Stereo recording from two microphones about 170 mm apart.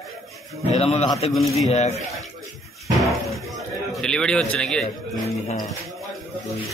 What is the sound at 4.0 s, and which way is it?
Speech, 5° left (ahead or behind).